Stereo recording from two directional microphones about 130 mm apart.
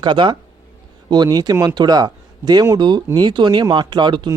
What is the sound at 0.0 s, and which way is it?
Speech, 35° right (ahead or behind).